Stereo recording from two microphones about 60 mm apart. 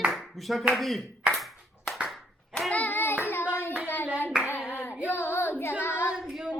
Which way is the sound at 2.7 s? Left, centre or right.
Left.